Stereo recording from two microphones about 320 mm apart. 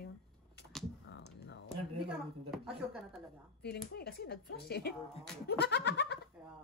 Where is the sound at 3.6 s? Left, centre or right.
Left.